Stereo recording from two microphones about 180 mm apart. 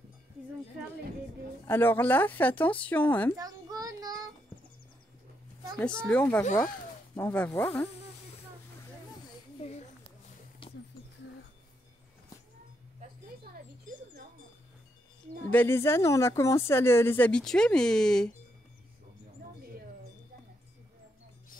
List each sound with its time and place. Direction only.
1.7 s speech: 10° left (ahead or behind)
3.3 s child singing: 20° right (ahead or behind)
5.8 s speech: 5° left (ahead or behind)
9.6 s a sound: 35° left (ahead or behind)
15.5 s speech: 10° left (ahead or behind)